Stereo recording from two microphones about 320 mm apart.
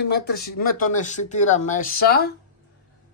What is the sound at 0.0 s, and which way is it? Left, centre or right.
Speech, left.